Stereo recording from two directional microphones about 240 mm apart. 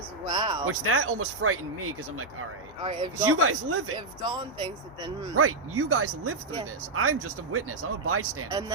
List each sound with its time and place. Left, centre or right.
0.3 s a sound: centre
0.6 s speech: right
2.8 s speech: centre
3.2 s speech: right
3.9 s speech: centre
5.4 s speech: right